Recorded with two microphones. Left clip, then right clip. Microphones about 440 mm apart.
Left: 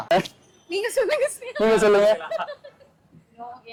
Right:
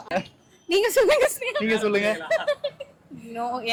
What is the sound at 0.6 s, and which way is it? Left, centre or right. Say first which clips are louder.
A woman's voice: right 4 dB; right.